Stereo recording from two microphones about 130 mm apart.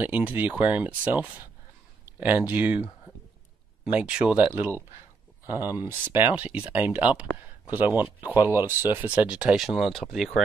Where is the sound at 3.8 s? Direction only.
5° right (ahead or behind).